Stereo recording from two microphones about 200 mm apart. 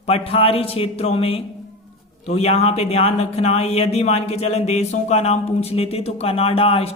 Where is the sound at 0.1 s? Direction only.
30° left (ahead or behind).